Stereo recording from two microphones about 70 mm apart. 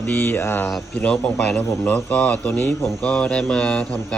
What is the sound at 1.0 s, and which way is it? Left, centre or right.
A man's voice, centre.